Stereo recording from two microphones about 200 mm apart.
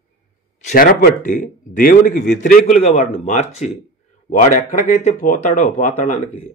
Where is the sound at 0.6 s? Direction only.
45° left (ahead or behind).